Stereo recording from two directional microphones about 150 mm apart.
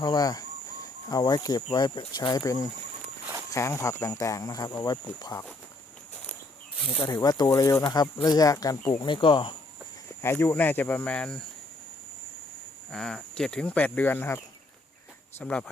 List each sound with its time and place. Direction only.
0.0 s speech: 25° left (ahead or behind)
7.0 s speech: 25° left (ahead or behind)
9.0 s speech: 35° left (ahead or behind)
10.2 s speech: 15° left (ahead or behind)
12.9 s speech: 5° left (ahead or behind)